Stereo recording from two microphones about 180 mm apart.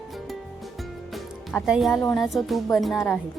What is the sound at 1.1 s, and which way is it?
A woman's voice, centre (ahead or behind).